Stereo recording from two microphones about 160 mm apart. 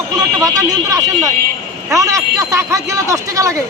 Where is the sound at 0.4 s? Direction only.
20° right (ahead or behind).